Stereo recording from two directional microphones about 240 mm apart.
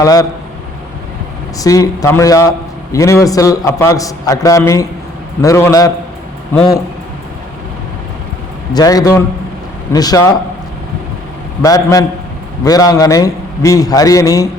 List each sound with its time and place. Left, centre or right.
0.0 s a man's voice: centre
1.5 s a man's voice: centre
8.7 s a man's voice: centre
11.6 s a man's voice: centre